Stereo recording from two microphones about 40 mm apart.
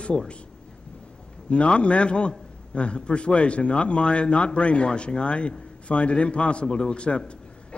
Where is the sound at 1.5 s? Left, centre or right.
Left.